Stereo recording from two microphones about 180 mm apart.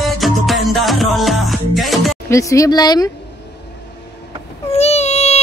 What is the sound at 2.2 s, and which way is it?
Speech, 15° left (ahead or behind).